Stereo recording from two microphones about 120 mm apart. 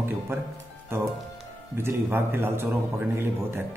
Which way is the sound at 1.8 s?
20° right (ahead or behind).